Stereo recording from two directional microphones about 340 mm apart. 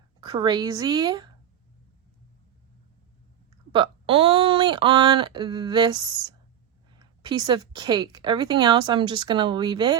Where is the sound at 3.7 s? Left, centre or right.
Centre.